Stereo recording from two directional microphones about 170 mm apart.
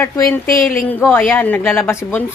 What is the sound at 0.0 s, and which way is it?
A woman's voice, 20° left (ahead or behind).